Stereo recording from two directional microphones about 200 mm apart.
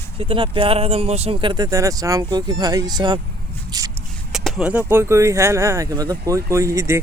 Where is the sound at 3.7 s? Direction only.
20° right (ahead or behind).